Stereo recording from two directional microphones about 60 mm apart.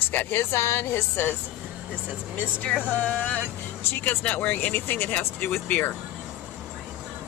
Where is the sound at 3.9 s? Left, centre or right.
Left.